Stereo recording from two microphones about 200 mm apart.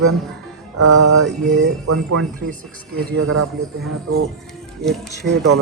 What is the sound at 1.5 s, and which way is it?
Speech, 90° right.